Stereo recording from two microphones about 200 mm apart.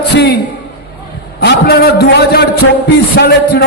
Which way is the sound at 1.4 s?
55° left (ahead or behind).